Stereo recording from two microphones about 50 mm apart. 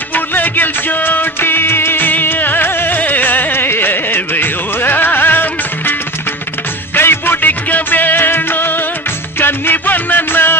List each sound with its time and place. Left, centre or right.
0.1 s music: left
7.0 s music: left